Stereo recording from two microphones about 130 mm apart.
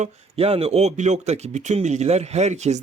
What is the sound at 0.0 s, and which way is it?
A man's voice, 50° right (ahead or behind).